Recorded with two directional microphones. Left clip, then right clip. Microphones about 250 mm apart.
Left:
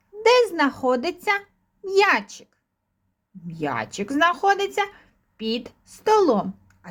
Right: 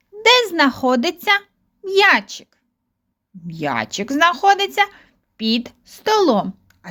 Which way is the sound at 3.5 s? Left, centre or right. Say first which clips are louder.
Right 5 dB; right.